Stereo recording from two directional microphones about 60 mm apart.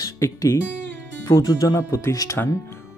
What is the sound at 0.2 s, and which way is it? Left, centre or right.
Speech, left.